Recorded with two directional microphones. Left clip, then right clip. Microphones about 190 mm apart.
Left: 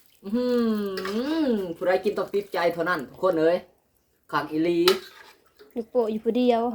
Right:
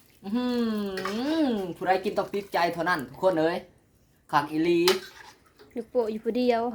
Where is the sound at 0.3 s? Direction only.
35° right (ahead or behind).